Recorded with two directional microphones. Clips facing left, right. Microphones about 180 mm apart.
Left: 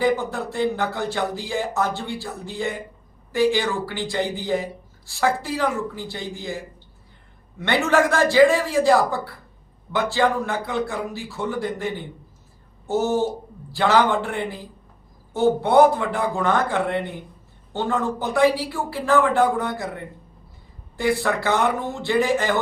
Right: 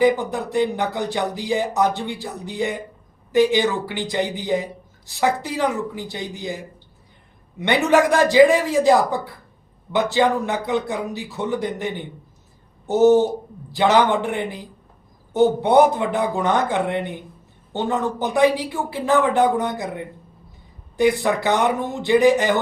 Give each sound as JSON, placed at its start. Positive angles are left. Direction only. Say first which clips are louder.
{"t": 0.0, "sound": "speech", "louder": "right 3 dB", "side_deg": -15}
{"t": 20.9, "sound": "speech", "louder": "right 4 dB", "side_deg": -20}